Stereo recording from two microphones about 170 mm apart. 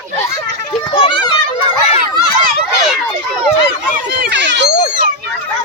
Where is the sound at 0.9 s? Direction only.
30° left (ahead or behind).